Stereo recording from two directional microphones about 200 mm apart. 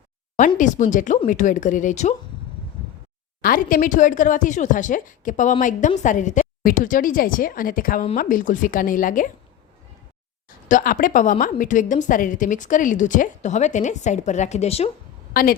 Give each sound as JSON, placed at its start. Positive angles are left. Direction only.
{"t": 0.3, "sound": "a woman's voice", "side_deg": 40}
{"t": 3.4, "sound": "a woman's voice", "side_deg": 45}
{"t": 10.7, "sound": "a woman's voice", "side_deg": 40}
{"t": 15.3, "sound": "a woman's voice", "side_deg": 45}